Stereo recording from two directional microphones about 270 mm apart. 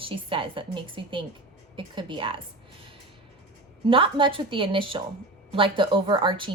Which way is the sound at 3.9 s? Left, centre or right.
Centre.